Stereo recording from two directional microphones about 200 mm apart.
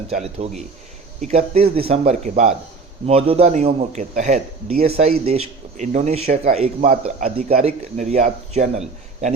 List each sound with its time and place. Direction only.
0.2 s a man's voice: 35° right (ahead or behind)